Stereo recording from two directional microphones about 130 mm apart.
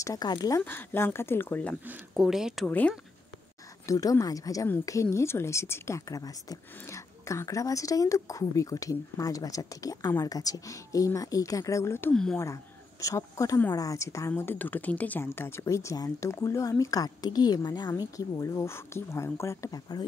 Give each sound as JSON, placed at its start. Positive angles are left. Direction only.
{"t": 0.0, "sound": "a woman's voice", "side_deg": 30}
{"t": 2.1, "sound": "speech", "side_deg": -5}
{"t": 3.8, "sound": "a woman's voice", "side_deg": 25}
{"t": 12.1, "sound": "speech", "side_deg": 5}
{"t": 13.0, "sound": "a woman's voice", "side_deg": 25}